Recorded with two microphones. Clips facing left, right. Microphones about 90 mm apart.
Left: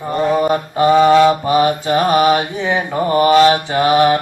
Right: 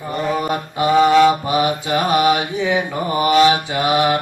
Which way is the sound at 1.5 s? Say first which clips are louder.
Left 4 dB; 35° left (ahead or behind).